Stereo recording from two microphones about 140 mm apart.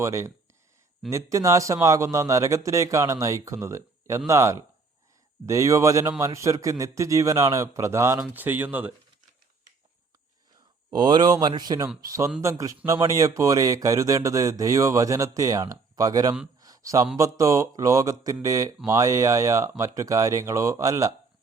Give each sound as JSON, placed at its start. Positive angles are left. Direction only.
{"t": 0.0, "sound": "a man's voice", "side_deg": -20}
{"t": 10.9, "sound": "a man's voice", "side_deg": -30}
{"t": 16.6, "sound": "a sound", "side_deg": -25}
{"t": 17.2, "sound": "a man's voice", "side_deg": -20}